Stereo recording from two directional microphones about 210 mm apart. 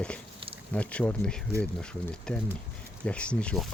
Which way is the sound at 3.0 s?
5° left (ahead or behind).